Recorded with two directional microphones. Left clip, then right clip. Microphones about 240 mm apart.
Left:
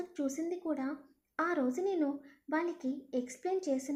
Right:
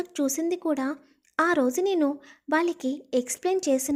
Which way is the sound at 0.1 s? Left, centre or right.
Right.